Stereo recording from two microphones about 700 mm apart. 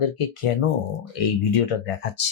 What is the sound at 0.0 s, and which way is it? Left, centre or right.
Speech, left.